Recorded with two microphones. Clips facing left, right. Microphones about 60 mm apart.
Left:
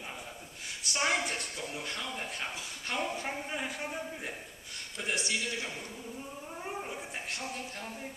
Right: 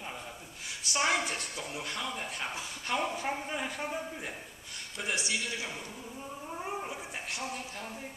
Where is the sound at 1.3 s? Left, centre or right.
Centre.